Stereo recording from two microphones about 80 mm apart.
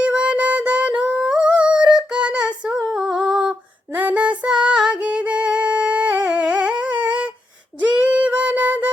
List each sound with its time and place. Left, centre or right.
0.0 s a sound: centre
2.0 s female singing: centre
3.9 s music: centre
7.8 s female singing: centre